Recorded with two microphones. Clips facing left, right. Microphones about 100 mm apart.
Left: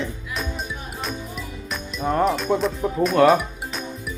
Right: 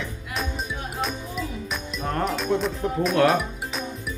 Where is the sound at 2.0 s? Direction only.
5° left (ahead or behind).